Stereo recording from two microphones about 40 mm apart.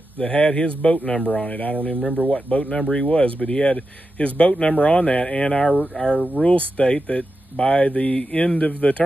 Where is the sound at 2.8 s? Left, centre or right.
Centre.